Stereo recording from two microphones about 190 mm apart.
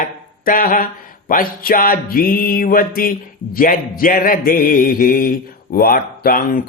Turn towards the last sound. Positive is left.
turn(degrees=50)  # may be behind; listen again after turning